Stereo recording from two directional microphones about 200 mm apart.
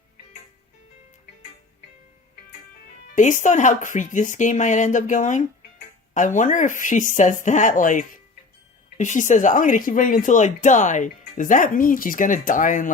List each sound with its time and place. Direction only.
3.2 s speech: 40° left (ahead or behind)